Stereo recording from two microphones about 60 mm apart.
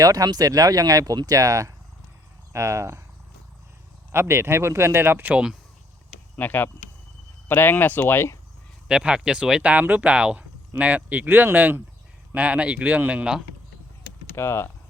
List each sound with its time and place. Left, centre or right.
0.0 s speech: right
2.5 s speech: right
4.1 s speech: right
5.2 s speech: centre
6.3 s speech: left
8.9 s speech: centre
14.3 s speech: left